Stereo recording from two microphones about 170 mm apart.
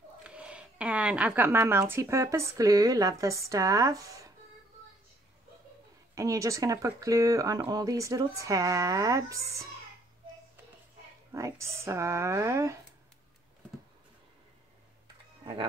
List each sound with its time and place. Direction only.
0.2 s speech: 5° right (ahead or behind)
6.1 s speech: 20° right (ahead or behind)
11.3 s speech: 15° right (ahead or behind)